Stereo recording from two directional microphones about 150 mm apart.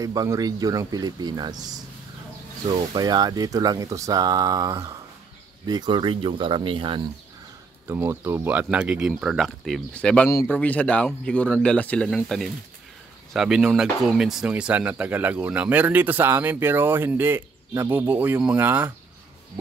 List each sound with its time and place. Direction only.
0.0 s speech: 25° right (ahead or behind)
7.8 s speech: 15° right (ahead or behind)